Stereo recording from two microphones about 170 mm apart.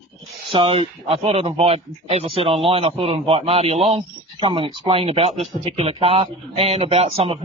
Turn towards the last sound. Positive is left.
turn(degrees=-35)  # may be behind; listen again after turning